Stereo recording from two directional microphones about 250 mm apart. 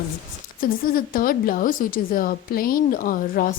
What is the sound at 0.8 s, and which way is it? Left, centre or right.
A woman's voice, left.